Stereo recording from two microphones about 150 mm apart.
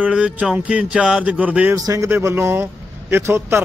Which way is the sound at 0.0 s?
10° right (ahead or behind).